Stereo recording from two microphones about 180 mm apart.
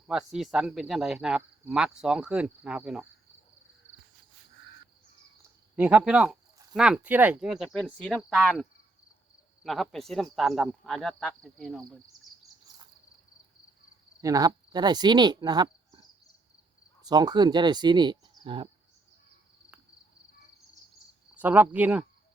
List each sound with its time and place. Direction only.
0.1 s speech: centre (ahead or behind)
5.7 s speech: 10° right (ahead or behind)
9.6 s speech: centre (ahead or behind)
14.2 s speech: 20° right (ahead or behind)
21.3 s speech: 10° right (ahead or behind)